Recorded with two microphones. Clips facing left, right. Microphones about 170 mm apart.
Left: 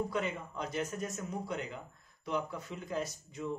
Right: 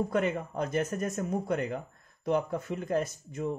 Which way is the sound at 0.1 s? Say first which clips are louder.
Right 7 dB; 50° right (ahead or behind).